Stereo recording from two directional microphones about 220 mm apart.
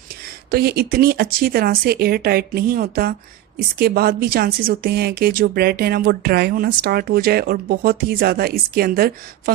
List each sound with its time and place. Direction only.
0.5 s speech: 45° right (ahead or behind)